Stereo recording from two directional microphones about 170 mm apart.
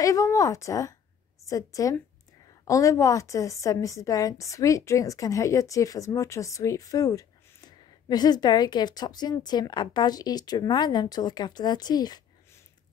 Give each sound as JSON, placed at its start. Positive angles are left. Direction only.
{"t": 0.0, "sound": "a woman's voice", "side_deg": 20}